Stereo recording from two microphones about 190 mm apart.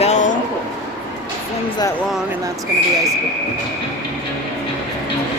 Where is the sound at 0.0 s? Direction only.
40° left (ahead or behind).